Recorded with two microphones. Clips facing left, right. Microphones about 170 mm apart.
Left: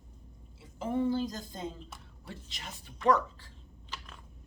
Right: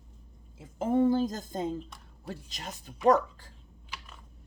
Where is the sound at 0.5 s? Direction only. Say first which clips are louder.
Right 6 dB; 45° right (ahead or behind).